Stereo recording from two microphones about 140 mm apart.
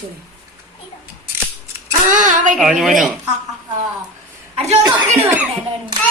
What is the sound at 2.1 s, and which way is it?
Speech, 65° right (ahead or behind).